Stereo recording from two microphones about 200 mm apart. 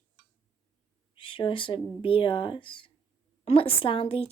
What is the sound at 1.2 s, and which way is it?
Speech, 25° left (ahead or behind).